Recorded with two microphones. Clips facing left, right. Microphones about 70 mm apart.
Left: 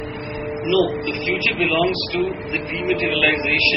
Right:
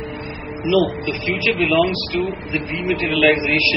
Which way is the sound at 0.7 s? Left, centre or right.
Centre.